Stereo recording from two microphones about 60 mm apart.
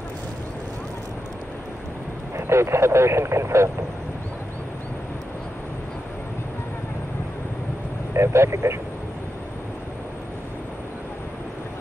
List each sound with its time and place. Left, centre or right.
2.3 s speech: right
8.1 s speech: right